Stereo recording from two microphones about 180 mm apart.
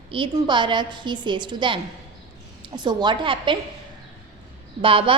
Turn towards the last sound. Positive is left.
turn(degrees=-30)  # may be behind; listen again after turning